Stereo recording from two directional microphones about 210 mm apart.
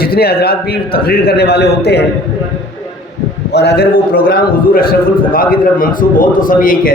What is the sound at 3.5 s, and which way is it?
A man's voice, 50° left (ahead or behind).